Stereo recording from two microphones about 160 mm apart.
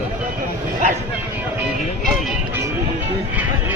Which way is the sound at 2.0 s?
Centre (ahead or behind).